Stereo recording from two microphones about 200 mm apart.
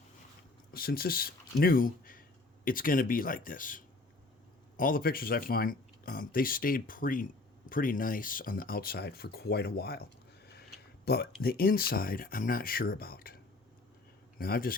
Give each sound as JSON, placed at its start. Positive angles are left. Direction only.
{"t": 0.7, "sound": "speech", "side_deg": 50}